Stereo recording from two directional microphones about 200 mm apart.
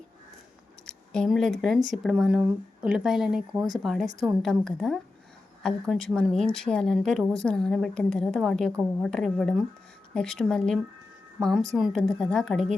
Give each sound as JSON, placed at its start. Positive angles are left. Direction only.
{"t": 0.9, "sound": "speech", "side_deg": 5}